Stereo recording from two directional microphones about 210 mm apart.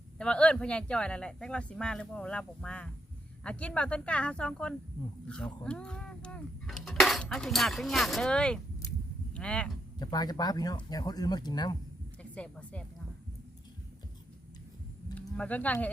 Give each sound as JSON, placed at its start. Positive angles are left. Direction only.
{"t": 0.2, "sound": "speech", "side_deg": 5}
{"t": 10.0, "sound": "speech", "side_deg": 20}
{"t": 12.3, "sound": "speech", "side_deg": 5}
{"t": 15.4, "sound": "speech", "side_deg": 5}